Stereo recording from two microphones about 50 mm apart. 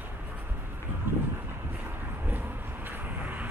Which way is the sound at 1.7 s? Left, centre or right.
Right.